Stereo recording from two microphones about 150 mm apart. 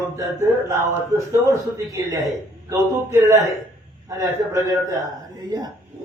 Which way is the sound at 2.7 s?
20° right (ahead or behind).